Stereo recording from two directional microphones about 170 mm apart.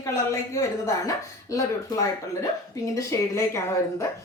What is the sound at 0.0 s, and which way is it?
A woman's voice, 15° left (ahead or behind).